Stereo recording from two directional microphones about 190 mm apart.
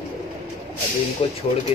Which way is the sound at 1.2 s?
35° left (ahead or behind).